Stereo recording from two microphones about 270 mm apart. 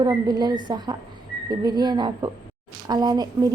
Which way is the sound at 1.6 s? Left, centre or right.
Centre.